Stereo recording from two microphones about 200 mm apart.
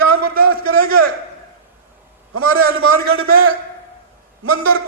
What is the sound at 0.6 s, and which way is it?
Speech, 50° right (ahead or behind).